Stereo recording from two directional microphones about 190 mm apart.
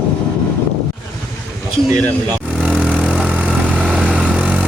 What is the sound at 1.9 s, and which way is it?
Speech, 20° right (ahead or behind).